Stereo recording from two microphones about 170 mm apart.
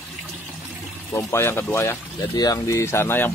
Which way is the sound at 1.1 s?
15° left (ahead or behind).